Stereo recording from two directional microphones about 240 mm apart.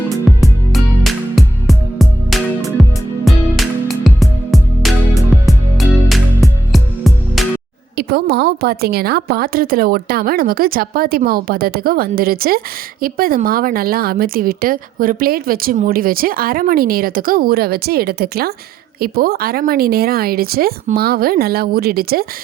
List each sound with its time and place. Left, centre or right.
0.3 s music: centre
7.9 s a woman's voice: right